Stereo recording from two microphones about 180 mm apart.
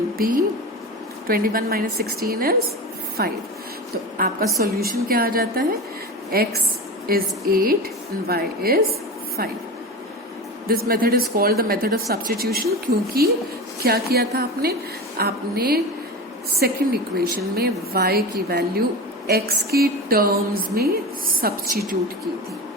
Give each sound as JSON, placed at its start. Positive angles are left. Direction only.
{"t": 0.2, "sound": "a woman's voice", "side_deg": -50}
{"t": 10.7, "sound": "a woman's voice", "side_deg": -55}